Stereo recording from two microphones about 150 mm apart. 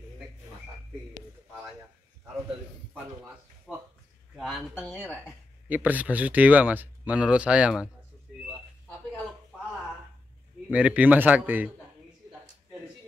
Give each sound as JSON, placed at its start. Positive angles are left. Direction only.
{"t": 3.7, "sound": "a sound", "side_deg": 0}
{"t": 4.4, "sound": "speech", "side_deg": -5}
{"t": 10.7, "sound": "speech", "side_deg": -10}